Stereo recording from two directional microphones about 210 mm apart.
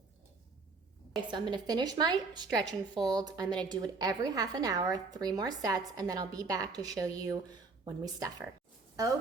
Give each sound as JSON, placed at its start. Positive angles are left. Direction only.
{"t": 1.3, "sound": "a woman's voice", "side_deg": -20}